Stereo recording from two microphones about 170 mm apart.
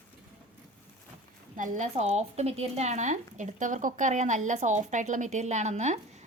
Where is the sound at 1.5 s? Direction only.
50° right (ahead or behind).